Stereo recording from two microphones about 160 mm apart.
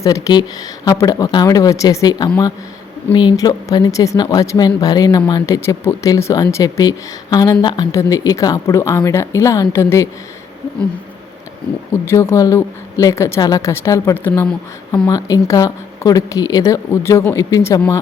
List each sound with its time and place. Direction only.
0.0 s speech: 25° left (ahead or behind)
12.0 s speech: 15° left (ahead or behind)